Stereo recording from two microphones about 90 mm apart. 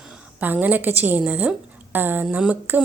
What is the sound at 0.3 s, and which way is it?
A woman's voice, 20° right (ahead or behind).